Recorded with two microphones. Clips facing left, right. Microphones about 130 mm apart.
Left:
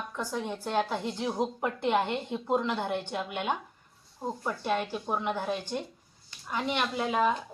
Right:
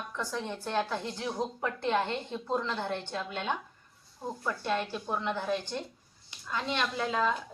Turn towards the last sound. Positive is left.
turn(degrees=15)  # may be behind; listen again after turning